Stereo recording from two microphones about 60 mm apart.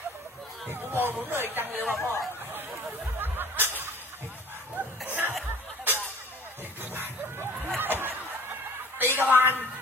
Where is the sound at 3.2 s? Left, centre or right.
Right.